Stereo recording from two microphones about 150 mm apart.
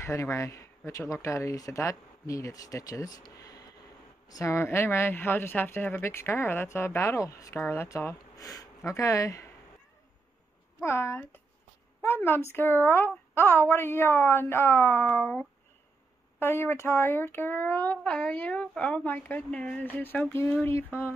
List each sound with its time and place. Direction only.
0.0 s speech: 20° left (ahead or behind)
10.8 s speech: 15° left (ahead or behind)